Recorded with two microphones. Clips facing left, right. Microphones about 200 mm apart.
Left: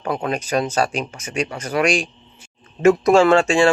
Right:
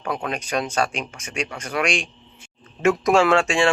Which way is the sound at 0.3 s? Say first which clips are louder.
Left 6 dB; 5° left (ahead or behind).